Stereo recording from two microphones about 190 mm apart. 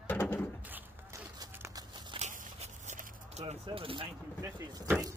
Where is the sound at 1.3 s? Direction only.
20° right (ahead or behind).